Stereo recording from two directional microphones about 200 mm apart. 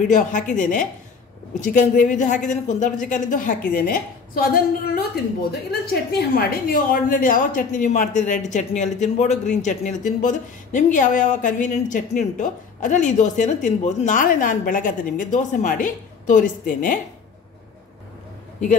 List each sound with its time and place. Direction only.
0.0 s speech: 40° left (ahead or behind)